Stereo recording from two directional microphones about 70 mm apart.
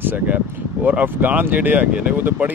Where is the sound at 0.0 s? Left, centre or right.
Right.